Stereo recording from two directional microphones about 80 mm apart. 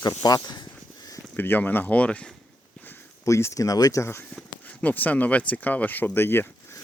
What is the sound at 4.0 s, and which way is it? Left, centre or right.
Speech, left.